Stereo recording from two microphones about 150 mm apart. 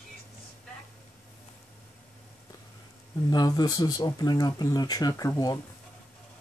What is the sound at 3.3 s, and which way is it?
Speech, 25° left (ahead or behind).